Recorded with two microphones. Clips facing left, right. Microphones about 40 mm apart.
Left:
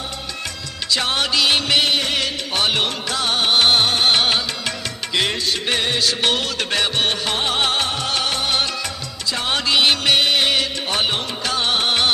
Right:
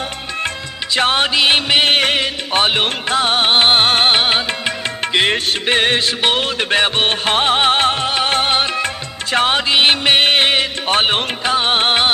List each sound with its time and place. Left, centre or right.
0.9 s music: right
1.9 s music: right
2.1 s music: right
3.8 s music: right
4.1 s music: right
5.1 s music: right
8.0 s music: right
8.3 s music: right
11.4 s music: right